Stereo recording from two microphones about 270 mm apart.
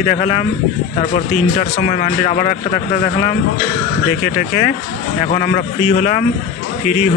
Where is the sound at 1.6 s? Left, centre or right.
Left.